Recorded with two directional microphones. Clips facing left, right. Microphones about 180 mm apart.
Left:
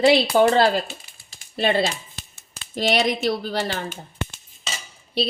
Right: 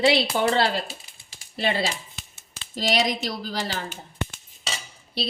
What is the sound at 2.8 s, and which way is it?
Speech, 60° left (ahead or behind).